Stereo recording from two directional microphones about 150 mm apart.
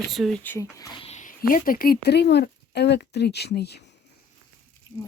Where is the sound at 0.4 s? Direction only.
20° left (ahead or behind).